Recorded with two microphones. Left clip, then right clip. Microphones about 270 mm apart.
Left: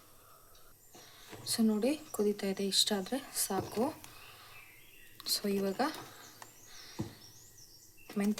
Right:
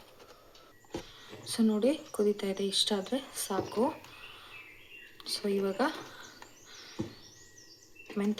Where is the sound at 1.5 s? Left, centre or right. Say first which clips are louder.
Right 3 dB; left.